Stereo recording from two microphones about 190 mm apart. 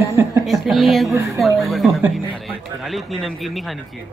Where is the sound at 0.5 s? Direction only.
Centre (ahead or behind).